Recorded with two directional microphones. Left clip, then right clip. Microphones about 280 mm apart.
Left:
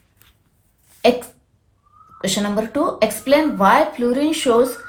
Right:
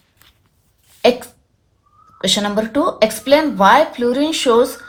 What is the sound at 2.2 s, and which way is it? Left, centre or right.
Speech, right.